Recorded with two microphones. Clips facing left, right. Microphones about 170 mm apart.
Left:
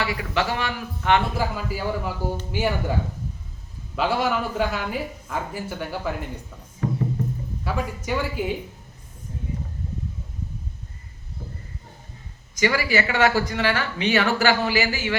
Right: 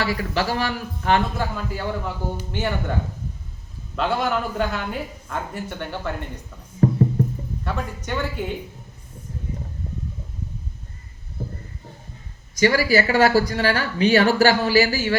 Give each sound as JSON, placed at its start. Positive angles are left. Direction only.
{"t": 0.0, "sound": "speech", "side_deg": -40}
{"t": 1.4, "sound": "a man's voice", "side_deg": 10}
{"t": 3.9, "sound": "speech", "side_deg": 5}
{"t": 6.8, "sound": "music", "side_deg": -40}
{"t": 7.6, "sound": "speech", "side_deg": 5}
{"t": 9.8, "sound": "a sound", "side_deg": -40}
{"t": 12.5, "sound": "speech", "side_deg": -35}